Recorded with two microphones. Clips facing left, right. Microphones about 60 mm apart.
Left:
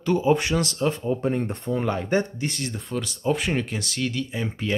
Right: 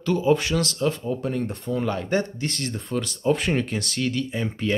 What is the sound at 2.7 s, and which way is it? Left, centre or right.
Speech, centre.